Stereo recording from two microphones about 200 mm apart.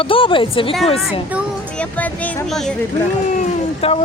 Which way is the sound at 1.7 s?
5° left (ahead or behind).